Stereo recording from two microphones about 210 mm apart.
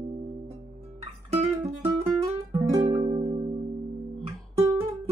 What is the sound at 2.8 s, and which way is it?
Music, 30° right (ahead or behind).